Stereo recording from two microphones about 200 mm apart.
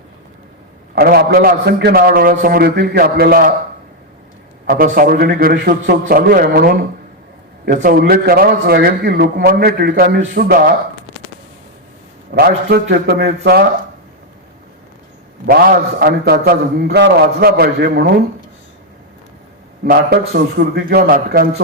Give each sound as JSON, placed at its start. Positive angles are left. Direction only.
{"t": 0.9, "sound": "a man's voice", "side_deg": -50}
{"t": 4.6, "sound": "a man's voice", "side_deg": -50}
{"t": 12.3, "sound": "a man's voice", "side_deg": -50}
{"t": 16.0, "sound": "a man's voice", "side_deg": -50}
{"t": 19.8, "sound": "a man's voice", "side_deg": -50}